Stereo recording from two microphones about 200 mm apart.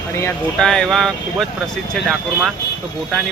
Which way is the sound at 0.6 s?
5° left (ahead or behind).